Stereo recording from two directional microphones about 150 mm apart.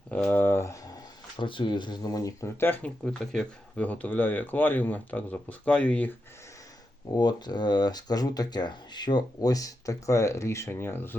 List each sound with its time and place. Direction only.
0.1 s a sound: 10° left (ahead or behind)
1.4 s speech: 35° left (ahead or behind); by 6.1 s 10° left (ahead or behind)
7.2 s speech: 30° left (ahead or behind)